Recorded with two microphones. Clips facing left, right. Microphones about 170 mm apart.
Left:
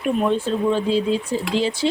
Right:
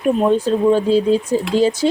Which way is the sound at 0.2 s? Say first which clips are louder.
Right 5 dB; 40° right (ahead or behind).